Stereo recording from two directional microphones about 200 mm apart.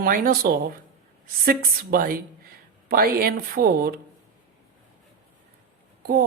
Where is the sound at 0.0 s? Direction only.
45° right (ahead or behind).